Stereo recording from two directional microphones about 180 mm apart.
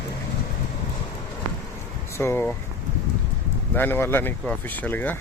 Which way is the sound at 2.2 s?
15° left (ahead or behind).